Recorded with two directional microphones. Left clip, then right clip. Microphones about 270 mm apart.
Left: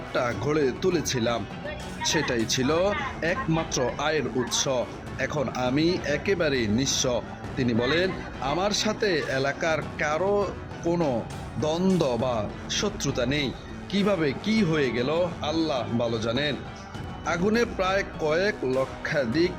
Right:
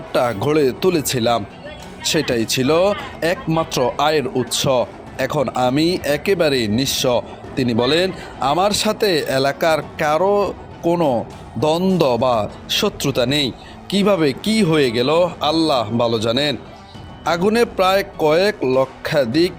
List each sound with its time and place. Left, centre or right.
0.1 s speech: centre